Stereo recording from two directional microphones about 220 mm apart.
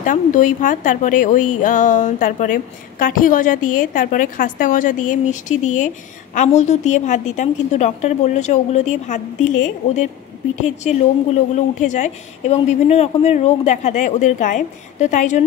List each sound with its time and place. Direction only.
0.0 s a woman's voice: 35° left (ahead or behind)